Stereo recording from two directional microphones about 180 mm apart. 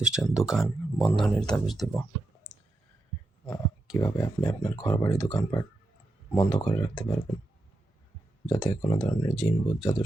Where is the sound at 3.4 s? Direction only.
20° left (ahead or behind).